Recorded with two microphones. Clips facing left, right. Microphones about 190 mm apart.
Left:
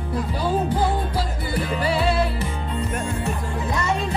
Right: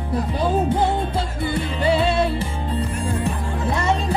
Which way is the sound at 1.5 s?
25° right (ahead or behind).